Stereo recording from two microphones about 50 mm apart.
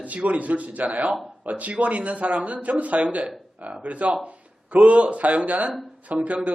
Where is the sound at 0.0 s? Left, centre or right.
Right.